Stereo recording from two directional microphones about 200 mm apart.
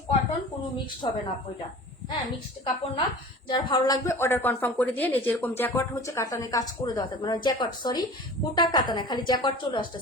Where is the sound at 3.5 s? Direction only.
20° left (ahead or behind).